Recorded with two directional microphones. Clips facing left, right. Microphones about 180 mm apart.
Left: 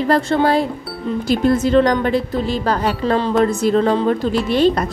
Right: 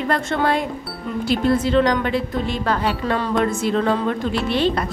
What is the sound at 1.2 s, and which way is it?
Speech, 45° left (ahead or behind).